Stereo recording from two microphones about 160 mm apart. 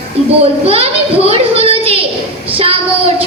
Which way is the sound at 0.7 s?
40° right (ahead or behind).